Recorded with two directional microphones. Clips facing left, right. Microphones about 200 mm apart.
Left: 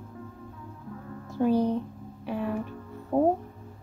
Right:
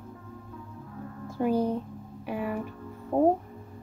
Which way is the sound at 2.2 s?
10° right (ahead or behind).